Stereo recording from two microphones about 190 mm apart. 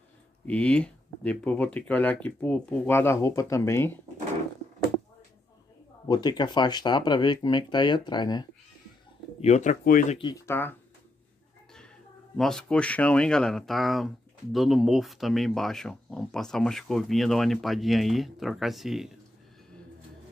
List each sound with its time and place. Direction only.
0.5 s speech: 5° left (ahead or behind)
6.0 s speech: 20° left (ahead or behind)
9.4 s speech: 40° left (ahead or behind)
10.1 s speech: 25° left (ahead or behind)
10.5 s speech: 10° left (ahead or behind)
12.4 s speech: centre (ahead or behind)